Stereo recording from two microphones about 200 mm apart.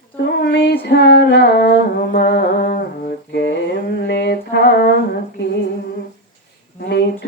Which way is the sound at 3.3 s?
60° left (ahead or behind).